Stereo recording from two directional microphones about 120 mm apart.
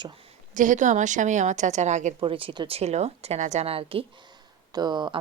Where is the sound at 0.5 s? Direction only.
90° right.